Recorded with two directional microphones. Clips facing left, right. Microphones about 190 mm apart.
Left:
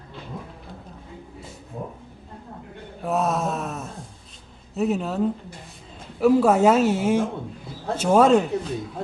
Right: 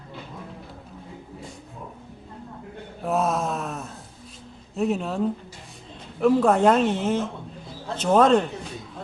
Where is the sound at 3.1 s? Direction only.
Centre (ahead or behind).